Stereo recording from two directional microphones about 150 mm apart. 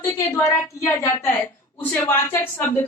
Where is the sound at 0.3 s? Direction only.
15° left (ahead or behind).